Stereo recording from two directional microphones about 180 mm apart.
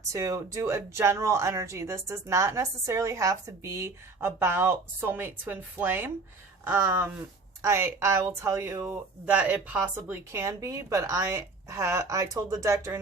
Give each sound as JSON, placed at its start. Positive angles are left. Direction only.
{"t": 0.1, "sound": "speech", "side_deg": -15}